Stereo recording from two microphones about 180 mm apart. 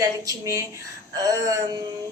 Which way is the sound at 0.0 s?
20° right (ahead or behind).